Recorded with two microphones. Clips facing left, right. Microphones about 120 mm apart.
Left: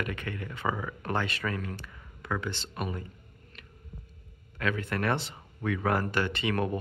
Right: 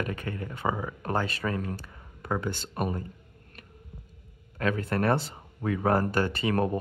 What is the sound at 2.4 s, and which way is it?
Speech, 45° right (ahead or behind).